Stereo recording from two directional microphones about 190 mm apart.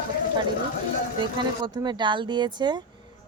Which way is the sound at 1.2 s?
25° right (ahead or behind).